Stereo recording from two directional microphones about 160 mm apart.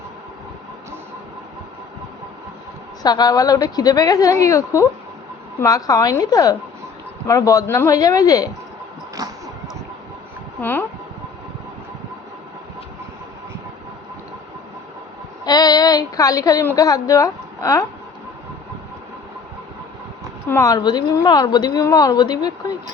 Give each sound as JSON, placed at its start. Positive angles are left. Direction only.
{"t": 3.0, "sound": "a woman's voice", "side_deg": 25}
{"t": 10.6, "sound": "speech", "side_deg": 10}
{"t": 15.4, "sound": "a woman's voice", "side_deg": 25}
{"t": 20.5, "sound": "a woman's voice", "side_deg": 20}